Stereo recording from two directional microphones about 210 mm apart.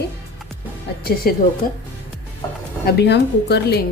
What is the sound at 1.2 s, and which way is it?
Speech, 45° left (ahead or behind).